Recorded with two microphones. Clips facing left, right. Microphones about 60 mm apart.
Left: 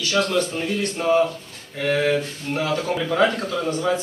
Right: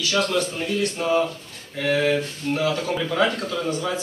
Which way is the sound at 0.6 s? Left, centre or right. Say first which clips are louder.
Even; centre.